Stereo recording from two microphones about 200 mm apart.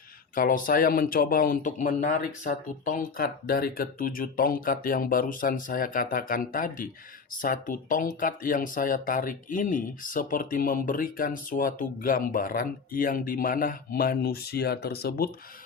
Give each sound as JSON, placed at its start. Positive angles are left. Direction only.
{"t": 0.3, "sound": "speech", "side_deg": 45}